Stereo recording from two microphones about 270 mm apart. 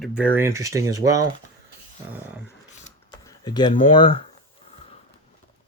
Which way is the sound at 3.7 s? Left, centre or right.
Centre.